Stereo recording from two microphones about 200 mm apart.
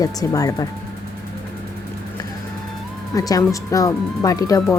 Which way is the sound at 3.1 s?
20° left (ahead or behind).